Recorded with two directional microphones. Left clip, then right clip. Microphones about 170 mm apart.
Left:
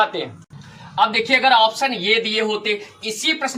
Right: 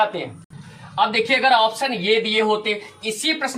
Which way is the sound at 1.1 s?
20° right (ahead or behind).